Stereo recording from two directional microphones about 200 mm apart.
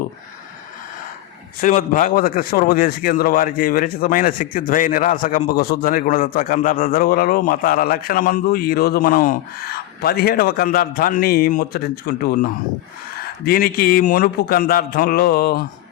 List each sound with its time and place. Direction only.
1.6 s a man's voice: 40° left (ahead or behind)